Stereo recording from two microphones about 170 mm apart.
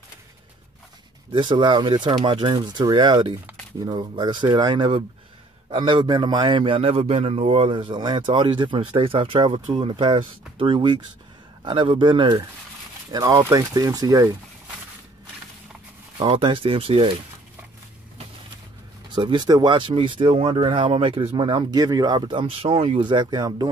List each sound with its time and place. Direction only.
1.3 s a man's voice: 30° right (ahead or behind)
16.2 s speech: 30° right (ahead or behind)
19.1 s a man's voice: 25° right (ahead or behind)